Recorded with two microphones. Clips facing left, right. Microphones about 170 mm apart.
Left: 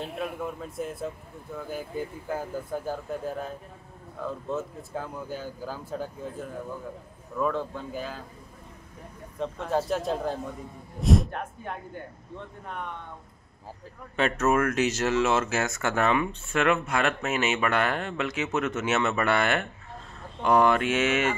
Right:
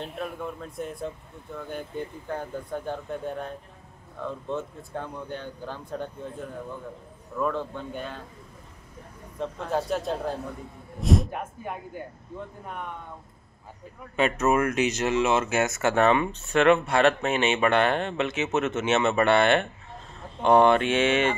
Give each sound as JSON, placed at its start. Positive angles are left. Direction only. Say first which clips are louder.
{"t": 0.0, "sound": "speech", "louder": "left 1 dB", "side_deg": 0}
{"t": 9.4, "sound": "speech", "louder": "left 1 dB", "side_deg": 0}
{"t": 14.1, "sound": "speech", "louder": "right 1 dB", "side_deg": -10}
{"t": 16.0, "sound": "speech", "louder": "right 3 dB", "side_deg": -30}